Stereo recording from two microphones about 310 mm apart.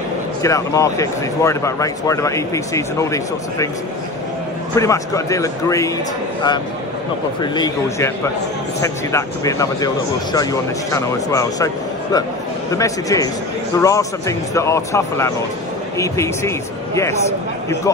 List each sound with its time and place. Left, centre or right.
0.4 s speech: centre
4.7 s speech: centre
7.5 s speech: centre